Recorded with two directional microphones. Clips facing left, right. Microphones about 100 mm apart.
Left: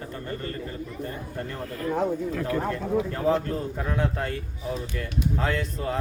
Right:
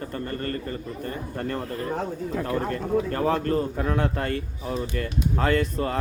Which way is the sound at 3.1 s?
70° right (ahead or behind).